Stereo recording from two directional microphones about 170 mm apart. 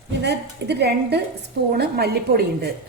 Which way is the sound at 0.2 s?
80° right.